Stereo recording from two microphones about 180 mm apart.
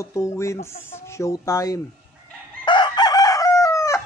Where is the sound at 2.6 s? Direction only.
25° left (ahead or behind).